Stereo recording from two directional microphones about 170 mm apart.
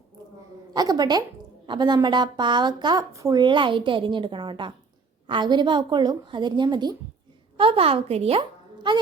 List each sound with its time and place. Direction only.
0.7 s a woman's voice: 25° right (ahead or behind)